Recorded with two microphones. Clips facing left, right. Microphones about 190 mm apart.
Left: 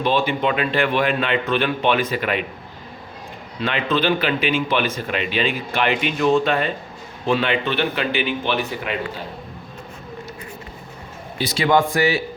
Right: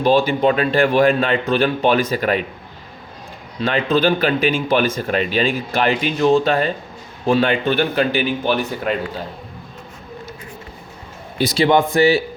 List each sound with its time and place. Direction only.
0.0 s speech: 40° right (ahead or behind)
3.6 s speech: 40° right (ahead or behind)
11.5 s speech: 25° right (ahead or behind)